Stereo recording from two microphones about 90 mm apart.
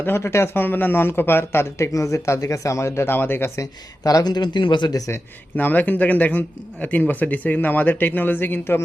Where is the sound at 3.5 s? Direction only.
40° left (ahead or behind).